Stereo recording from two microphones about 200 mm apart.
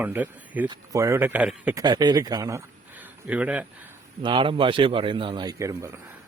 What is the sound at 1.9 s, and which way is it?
Speech, 20° right (ahead or behind).